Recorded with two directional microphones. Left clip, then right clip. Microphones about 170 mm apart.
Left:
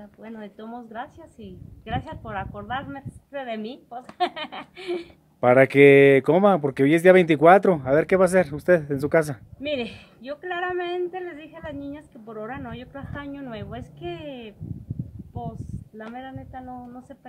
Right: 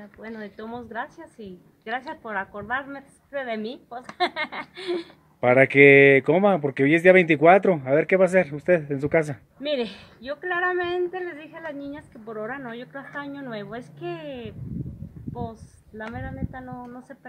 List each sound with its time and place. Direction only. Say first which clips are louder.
0.2 s speech: right 3 dB; 10° right (ahead or behind)
5.4 s speech: even; 25° left (ahead or behind)
9.6 s speech: right 2 dB; 5° right (ahead or behind)